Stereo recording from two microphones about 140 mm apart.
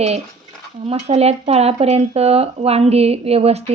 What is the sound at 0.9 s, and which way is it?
Speech, 45° right (ahead or behind).